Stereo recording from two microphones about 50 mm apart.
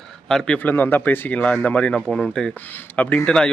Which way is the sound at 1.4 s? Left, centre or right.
Left.